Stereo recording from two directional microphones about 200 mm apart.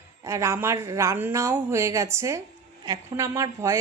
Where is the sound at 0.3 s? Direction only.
15° right (ahead or behind).